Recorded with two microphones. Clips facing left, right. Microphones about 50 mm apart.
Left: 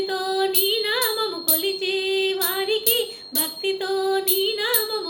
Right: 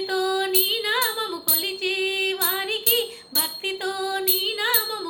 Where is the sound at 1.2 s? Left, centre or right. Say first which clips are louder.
Left 4 dB; right.